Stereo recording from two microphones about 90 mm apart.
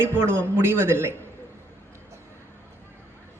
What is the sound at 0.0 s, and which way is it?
A man's voice, 30° right (ahead or behind).